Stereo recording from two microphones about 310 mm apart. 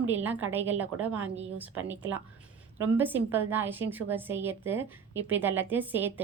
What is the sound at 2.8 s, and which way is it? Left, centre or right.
A woman's voice, centre.